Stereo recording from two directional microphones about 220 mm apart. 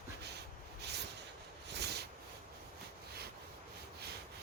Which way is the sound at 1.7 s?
50° right (ahead or behind).